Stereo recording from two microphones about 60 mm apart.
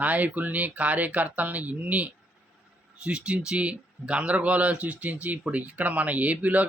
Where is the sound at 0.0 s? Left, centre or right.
Right.